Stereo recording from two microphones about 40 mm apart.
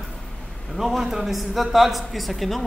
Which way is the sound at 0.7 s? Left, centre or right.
Centre.